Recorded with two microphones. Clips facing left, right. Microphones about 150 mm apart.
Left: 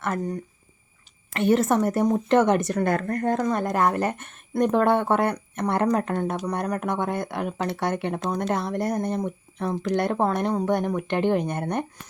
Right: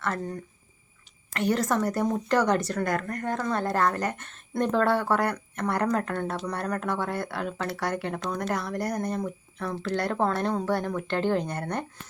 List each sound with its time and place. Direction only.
0.0 s speech: 20° left (ahead or behind)
3.3 s speech: 15° left (ahead or behind)